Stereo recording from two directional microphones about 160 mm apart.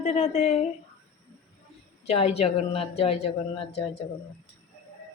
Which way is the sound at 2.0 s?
40° left (ahead or behind).